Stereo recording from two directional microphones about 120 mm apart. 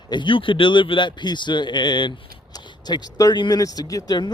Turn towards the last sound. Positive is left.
turn(degrees=35)  # may be behind; listen again after turning